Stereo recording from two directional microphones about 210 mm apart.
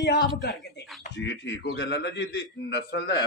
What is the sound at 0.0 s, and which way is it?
A man's voice, 55° left (ahead or behind).